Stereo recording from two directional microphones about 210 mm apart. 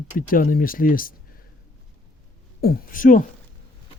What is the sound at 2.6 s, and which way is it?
Speech, 45° left (ahead or behind).